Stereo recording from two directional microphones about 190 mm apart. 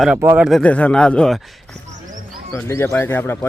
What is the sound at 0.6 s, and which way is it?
Speech, 5° left (ahead or behind).